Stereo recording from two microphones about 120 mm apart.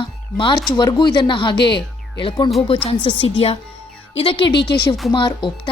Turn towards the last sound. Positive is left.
turn(degrees=40)  # may be behind; listen again after turning